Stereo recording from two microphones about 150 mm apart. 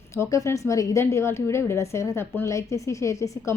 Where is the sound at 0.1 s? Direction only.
20° left (ahead or behind).